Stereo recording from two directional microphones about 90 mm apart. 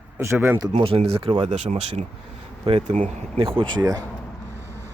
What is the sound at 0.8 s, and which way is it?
Speech, 85° right.